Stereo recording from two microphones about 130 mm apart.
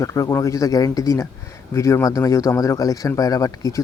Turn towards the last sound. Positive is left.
turn(degrees=25)  # may be behind; listen again after turning